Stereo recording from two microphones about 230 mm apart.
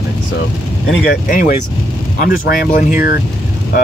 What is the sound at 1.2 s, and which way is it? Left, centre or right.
Speech, left.